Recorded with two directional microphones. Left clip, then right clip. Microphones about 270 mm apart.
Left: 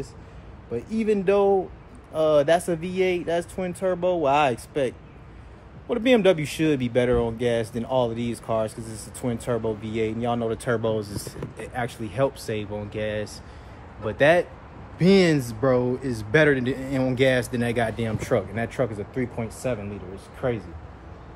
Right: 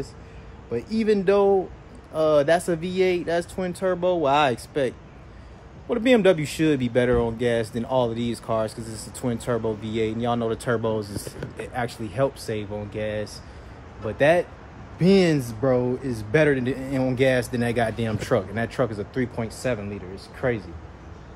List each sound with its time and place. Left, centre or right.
1.0 s speech: centre
11.1 s speech: centre
11.6 s speech: centre